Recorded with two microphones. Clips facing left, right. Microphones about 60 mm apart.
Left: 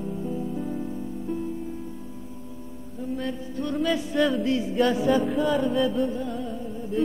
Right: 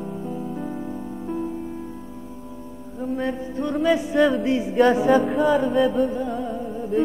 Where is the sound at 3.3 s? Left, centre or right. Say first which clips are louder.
Right 5 dB; right.